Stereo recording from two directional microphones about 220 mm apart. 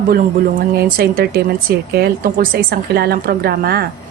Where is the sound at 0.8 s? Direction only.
40° right (ahead or behind).